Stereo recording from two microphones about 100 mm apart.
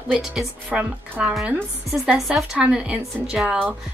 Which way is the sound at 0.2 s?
5° right (ahead or behind).